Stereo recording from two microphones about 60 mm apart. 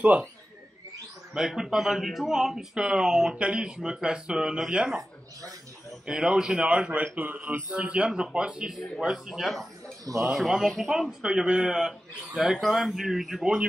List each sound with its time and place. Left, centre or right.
0.0 s speech: right
1.3 s speech: centre
6.0 s speech: centre
12.5 s speech: centre